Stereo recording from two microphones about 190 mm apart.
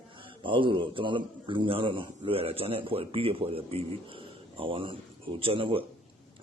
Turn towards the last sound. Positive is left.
turn(degrees=-30)  # may be behind; listen again after turning